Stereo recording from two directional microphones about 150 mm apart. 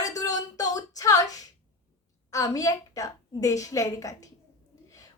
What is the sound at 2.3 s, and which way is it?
A woman's voice, 20° left (ahead or behind).